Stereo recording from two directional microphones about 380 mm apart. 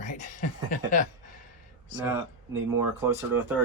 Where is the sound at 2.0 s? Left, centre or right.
Centre.